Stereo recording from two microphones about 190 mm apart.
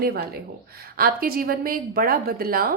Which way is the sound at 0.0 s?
55° right (ahead or behind).